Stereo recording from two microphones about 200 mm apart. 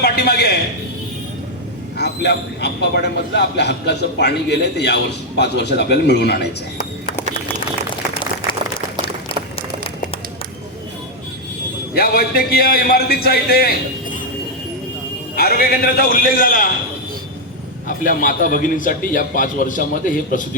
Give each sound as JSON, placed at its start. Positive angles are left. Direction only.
{"t": 0.0, "sound": "a sound", "side_deg": 55}
{"t": 2.0, "sound": "a man's voice", "side_deg": 55}
{"t": 11.9, "sound": "a man's voice", "side_deg": 50}
{"t": 15.4, "sound": "a man's voice", "side_deg": 50}
{"t": 17.8, "sound": "a man's voice", "side_deg": 45}